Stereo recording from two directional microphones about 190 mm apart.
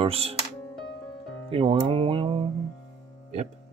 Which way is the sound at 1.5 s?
30° right (ahead or behind).